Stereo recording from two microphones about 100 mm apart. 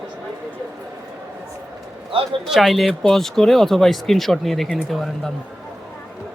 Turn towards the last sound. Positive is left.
turn(degrees=5)  # may be behind; listen again after turning